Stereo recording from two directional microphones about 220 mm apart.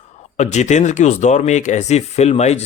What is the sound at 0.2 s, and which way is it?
Speech, 30° left (ahead or behind).